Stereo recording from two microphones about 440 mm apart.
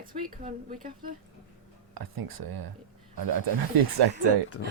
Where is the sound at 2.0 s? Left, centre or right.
Right.